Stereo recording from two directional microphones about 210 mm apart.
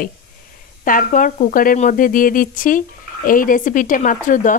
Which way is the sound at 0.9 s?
40° left (ahead or behind).